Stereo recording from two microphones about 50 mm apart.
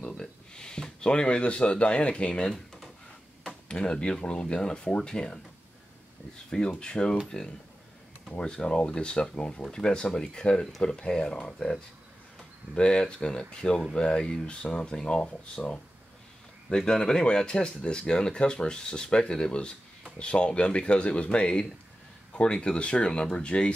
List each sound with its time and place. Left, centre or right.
0.0 s speech: centre
2.5 s drawer open or close: centre
3.6 s speech: centre
6.8 s speech: centre
12.7 s speech: left